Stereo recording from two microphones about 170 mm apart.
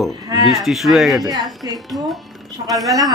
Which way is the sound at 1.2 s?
20° right (ahead or behind).